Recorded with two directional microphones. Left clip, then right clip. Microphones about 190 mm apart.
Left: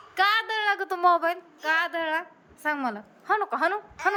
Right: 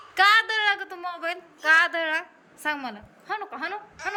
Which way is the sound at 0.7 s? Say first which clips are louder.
Left 11 dB; 30° left (ahead or behind).